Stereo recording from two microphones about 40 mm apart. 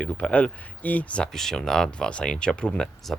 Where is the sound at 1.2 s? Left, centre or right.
Centre.